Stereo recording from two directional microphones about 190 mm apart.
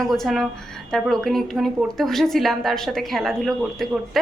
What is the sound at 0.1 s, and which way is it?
A woman's voice, centre (ahead or behind).